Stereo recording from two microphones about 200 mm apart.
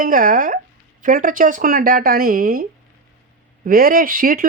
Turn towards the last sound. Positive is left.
turn(degrees=-45)  # may be behind; listen again after turning